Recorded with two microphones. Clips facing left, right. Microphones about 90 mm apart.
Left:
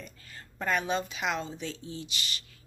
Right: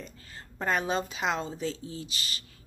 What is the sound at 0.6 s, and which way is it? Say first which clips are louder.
Speech: right 1 dB; 30° right (ahead or behind).